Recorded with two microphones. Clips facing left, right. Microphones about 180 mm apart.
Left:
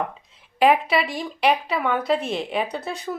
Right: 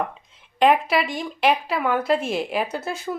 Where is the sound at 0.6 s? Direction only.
Centre (ahead or behind).